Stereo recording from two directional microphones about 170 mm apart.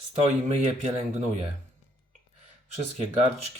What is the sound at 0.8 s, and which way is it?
Speech, 35° right (ahead or behind).